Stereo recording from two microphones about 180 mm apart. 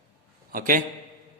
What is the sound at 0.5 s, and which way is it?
Speech, 50° right (ahead or behind).